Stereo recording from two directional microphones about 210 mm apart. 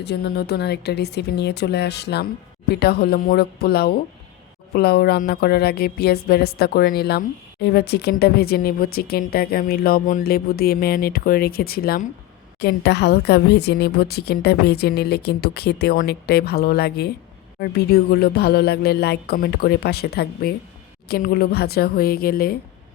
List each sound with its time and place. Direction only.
0.0 s a woman's voice: 50° left (ahead or behind)